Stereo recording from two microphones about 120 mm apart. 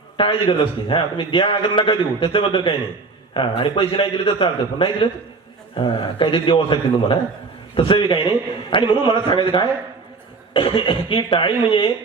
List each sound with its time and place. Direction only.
0.2 s a man's voice: 45° left (ahead or behind)